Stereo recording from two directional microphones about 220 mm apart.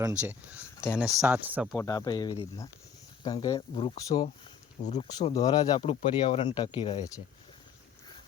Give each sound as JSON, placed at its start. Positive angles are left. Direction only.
{"t": 0.1, "sound": "speech", "side_deg": -5}
{"t": 1.7, "sound": "speech", "side_deg": 15}
{"t": 4.8, "sound": "speech", "side_deg": 30}
{"t": 5.0, "sound": "speech", "side_deg": 15}